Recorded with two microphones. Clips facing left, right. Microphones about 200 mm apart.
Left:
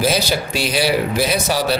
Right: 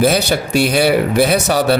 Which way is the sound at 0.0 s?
55° right (ahead or behind).